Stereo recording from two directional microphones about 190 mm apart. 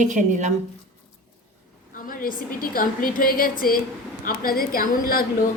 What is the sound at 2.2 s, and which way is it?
A woman's voice, 50° left (ahead or behind).